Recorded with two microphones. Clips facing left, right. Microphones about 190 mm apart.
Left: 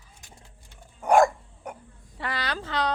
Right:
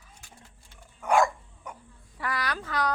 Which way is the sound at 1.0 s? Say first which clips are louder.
Left 4 dB; 45° left (ahead or behind).